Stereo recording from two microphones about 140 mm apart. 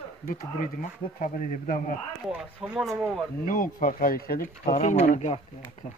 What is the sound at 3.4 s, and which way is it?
Speech, 80° left.